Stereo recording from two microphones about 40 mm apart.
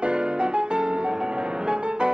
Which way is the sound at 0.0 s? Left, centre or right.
Right.